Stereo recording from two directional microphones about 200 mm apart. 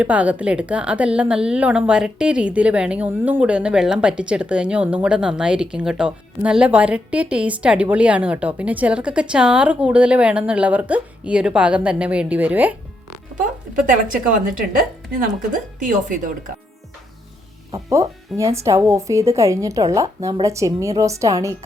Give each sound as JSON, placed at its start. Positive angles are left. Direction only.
{"t": 0.0, "sound": "speech", "side_deg": -5}
{"t": 15.8, "sound": "speech", "side_deg": -40}
{"t": 17.7, "sound": "speech", "side_deg": -15}